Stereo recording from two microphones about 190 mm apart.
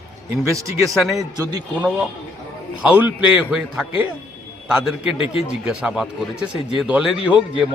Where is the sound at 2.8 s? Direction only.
5° right (ahead or behind).